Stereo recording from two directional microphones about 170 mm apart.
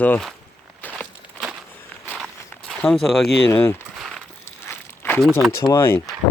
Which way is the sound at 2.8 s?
Centre (ahead or behind).